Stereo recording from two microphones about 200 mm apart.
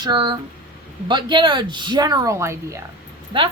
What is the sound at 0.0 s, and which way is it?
Speech, 20° right (ahead or behind).